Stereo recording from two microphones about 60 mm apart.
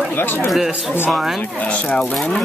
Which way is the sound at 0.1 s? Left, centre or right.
Left.